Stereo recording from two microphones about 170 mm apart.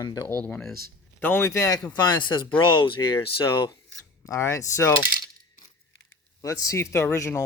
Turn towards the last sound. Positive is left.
turn(degrees=15)  # may be behind; listen again after turning